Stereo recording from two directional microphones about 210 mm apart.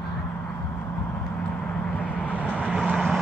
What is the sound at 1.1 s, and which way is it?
Vehicle, 5° left (ahead or behind).